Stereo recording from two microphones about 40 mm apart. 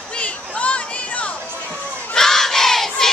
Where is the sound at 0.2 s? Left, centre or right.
Left.